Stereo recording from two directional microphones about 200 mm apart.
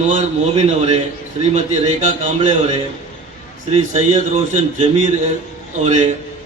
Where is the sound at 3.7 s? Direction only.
35° right (ahead or behind).